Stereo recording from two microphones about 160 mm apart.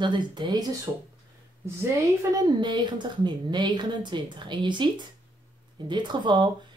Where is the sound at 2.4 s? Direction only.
30° right (ahead or behind).